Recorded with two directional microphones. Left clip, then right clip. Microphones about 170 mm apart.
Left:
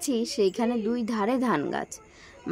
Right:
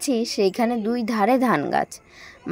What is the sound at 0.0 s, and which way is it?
A woman's voice, 25° right (ahead or behind).